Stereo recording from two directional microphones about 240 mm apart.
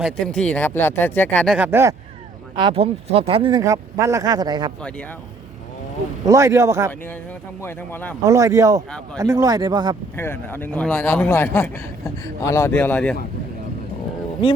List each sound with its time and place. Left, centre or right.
0.0 s speech: centre
1.5 s speech: centre
2.6 s speech: right
4.8 s speech: centre
6.2 s speech: centre
7.6 s a man's voice: centre
8.2 s speech: centre
10.2 s a man's voice: centre